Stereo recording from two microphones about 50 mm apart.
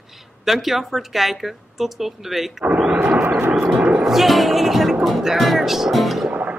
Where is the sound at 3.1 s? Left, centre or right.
Right.